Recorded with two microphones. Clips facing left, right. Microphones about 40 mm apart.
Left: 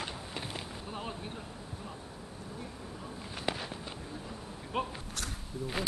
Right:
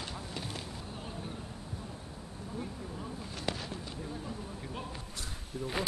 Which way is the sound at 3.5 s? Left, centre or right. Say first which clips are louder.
Left 2 dB; centre.